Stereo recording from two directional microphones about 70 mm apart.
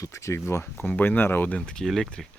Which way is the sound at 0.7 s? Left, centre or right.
Left.